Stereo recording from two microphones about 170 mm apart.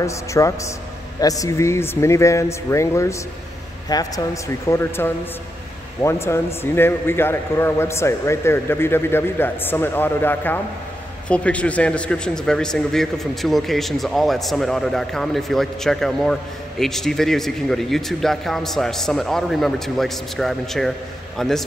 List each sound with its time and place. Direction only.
0.0 s a man's voice: 20° left (ahead or behind); by 21.6 s centre (ahead or behind)